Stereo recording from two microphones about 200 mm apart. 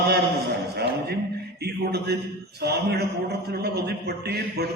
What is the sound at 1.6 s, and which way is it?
A man's voice, 55° right (ahead or behind).